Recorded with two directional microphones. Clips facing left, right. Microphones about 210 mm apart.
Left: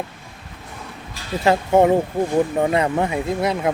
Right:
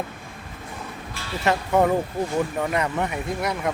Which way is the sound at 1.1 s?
30° left (ahead or behind).